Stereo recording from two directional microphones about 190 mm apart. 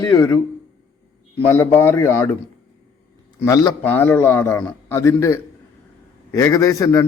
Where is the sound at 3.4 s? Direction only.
20° left (ahead or behind).